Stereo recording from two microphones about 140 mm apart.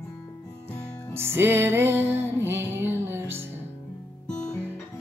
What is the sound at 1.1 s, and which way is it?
Music, 15° right (ahead or behind).